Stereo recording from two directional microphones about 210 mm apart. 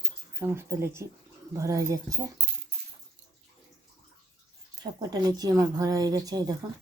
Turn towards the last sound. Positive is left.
turn(degrees=-15)  # may be behind; listen again after turning